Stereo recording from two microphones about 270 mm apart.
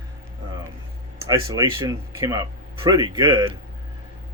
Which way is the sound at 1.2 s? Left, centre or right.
Centre.